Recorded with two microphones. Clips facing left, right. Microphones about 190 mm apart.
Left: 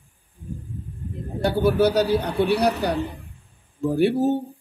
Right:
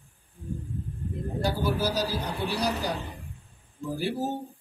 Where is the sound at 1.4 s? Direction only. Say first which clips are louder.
Left 9 dB; 65° left (ahead or behind).